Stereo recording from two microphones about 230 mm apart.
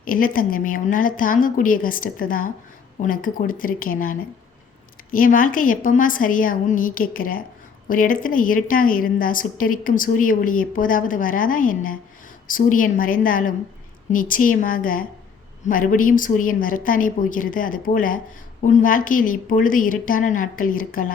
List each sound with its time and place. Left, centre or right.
0.0 s a woman's voice: left